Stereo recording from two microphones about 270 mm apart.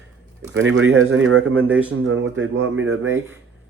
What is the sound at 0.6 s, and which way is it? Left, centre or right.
Speech, right.